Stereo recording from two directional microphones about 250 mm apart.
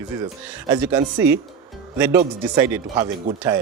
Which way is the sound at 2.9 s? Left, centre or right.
Centre.